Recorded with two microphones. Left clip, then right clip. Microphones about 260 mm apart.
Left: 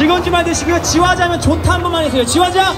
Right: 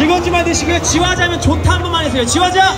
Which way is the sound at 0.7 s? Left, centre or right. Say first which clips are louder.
Left 2 dB; centre.